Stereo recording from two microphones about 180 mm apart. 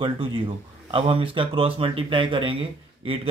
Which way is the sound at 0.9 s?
30° right (ahead or behind).